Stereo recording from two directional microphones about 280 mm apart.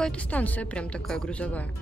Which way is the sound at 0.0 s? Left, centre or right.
Centre.